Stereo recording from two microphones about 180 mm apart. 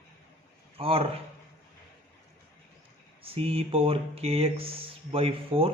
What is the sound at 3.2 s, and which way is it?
Speech, 35° right (ahead or behind).